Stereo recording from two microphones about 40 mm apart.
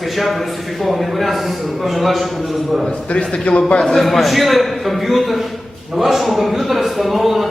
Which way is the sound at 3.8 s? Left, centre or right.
Centre.